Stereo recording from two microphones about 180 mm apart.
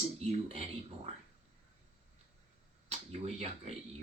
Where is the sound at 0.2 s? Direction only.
35° right (ahead or behind).